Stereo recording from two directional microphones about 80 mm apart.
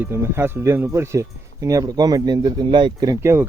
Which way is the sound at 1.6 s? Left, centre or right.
Right.